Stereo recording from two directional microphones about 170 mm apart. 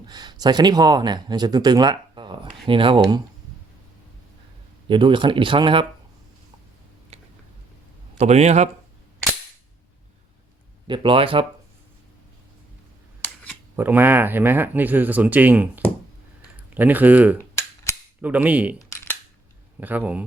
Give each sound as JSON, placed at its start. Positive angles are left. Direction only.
{"t": 0.1, "sound": "speech", "side_deg": -25}
{"t": 4.9, "sound": "speech", "side_deg": -30}
{"t": 8.2, "sound": "speech", "side_deg": -40}
{"t": 10.8, "sound": "speech", "side_deg": -30}
{"t": 13.2, "sound": "camera", "side_deg": 10}
{"t": 13.7, "sound": "speech", "side_deg": -10}
{"t": 17.3, "sound": "cap gun", "side_deg": 15}
{"t": 18.2, "sound": "speech", "side_deg": -10}
{"t": 18.8, "sound": "camera", "side_deg": 15}
{"t": 19.8, "sound": "speech", "side_deg": -10}